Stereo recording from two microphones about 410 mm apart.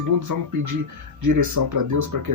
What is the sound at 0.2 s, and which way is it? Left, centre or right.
Speech, right.